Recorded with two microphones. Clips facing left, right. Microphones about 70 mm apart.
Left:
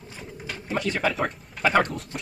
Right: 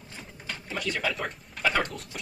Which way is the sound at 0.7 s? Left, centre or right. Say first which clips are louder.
Left 6 dB; left.